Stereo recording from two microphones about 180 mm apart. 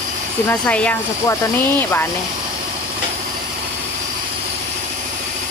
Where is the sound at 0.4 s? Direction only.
5° left (ahead or behind).